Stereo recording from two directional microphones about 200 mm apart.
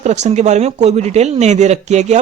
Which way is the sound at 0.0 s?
35° right (ahead or behind).